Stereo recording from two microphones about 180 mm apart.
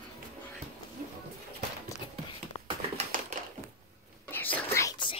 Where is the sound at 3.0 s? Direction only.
40° right (ahead or behind).